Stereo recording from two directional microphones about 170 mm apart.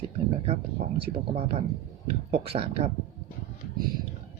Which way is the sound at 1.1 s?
35° right (ahead or behind).